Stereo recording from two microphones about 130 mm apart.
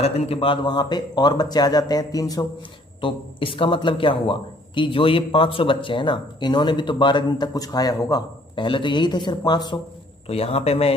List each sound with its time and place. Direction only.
0.0 s a man's voice: 50° left (ahead or behind); by 2.4 s 30° left (ahead or behind)
3.0 s a man's voice: 40° left (ahead or behind)
10.2 s a man's voice: 50° left (ahead or behind)